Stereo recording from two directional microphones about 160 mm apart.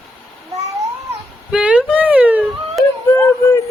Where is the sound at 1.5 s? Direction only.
5° right (ahead or behind).